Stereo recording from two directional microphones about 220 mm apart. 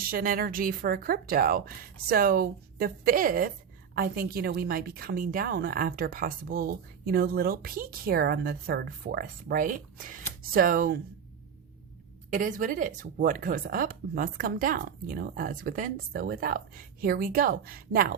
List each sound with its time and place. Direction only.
0.0 s a woman's voice: 40° right (ahead or behind)
12.3 s speech: 35° right (ahead or behind)